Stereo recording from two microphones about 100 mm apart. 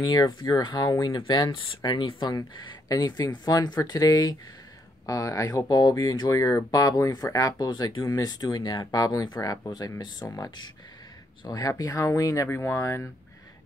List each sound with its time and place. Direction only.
0.0 s speech: 45° left (ahead or behind)
5.0 s speech: 35° left (ahead or behind)